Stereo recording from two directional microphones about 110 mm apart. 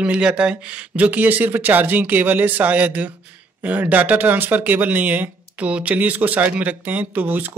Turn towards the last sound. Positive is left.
turn(degrees=-15)  # may be behind; listen again after turning